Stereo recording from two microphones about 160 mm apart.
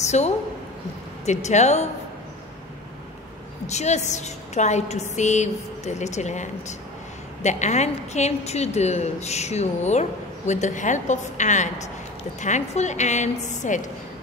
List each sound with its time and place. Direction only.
0.0 s a sound: 45° left (ahead or behind)
1.2 s a woman's voice: 45° left (ahead or behind)
3.6 s a woman's voice: 45° left (ahead or behind)